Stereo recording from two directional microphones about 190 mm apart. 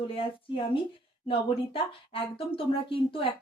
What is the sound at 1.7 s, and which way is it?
Speech, 30° left (ahead or behind).